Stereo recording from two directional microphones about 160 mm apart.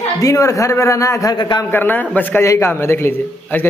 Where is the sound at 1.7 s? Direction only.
10° left (ahead or behind).